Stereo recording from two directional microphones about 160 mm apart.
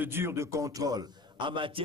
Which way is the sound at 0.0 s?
15° right (ahead or behind).